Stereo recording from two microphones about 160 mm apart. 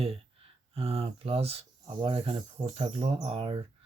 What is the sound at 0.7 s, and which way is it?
Speech, 40° right (ahead or behind).